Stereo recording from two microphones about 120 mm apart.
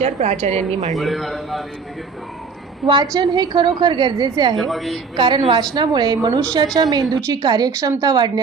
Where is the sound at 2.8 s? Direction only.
40° right (ahead or behind).